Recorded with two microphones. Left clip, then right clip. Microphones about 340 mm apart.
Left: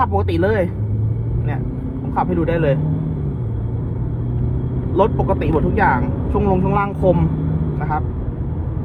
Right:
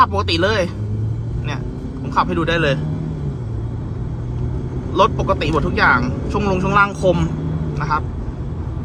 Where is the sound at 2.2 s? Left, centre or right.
Right.